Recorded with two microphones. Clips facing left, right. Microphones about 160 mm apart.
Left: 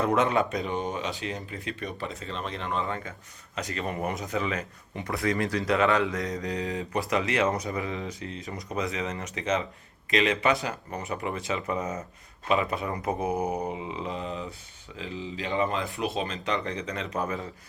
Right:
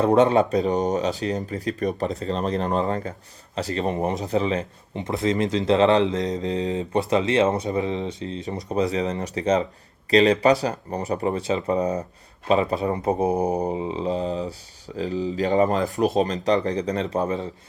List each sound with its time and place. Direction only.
0.0 s speech: 30° right (ahead or behind)